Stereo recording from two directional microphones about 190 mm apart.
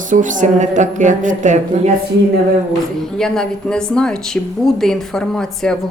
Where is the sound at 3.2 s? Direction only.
5° left (ahead or behind).